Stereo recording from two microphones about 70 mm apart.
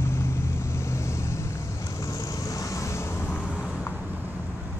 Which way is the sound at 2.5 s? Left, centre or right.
Left.